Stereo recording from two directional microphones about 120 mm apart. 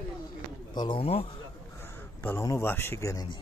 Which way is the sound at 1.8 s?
15° left (ahead or behind).